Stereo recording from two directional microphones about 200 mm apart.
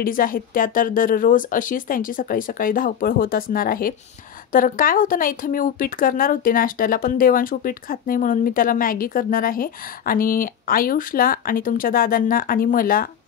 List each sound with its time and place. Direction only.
0.0 s speech: 45° left (ahead or behind)